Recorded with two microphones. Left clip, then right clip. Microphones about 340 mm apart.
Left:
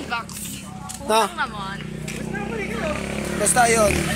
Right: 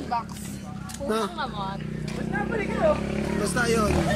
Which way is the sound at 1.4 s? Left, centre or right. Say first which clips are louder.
Left 5 dB; centre.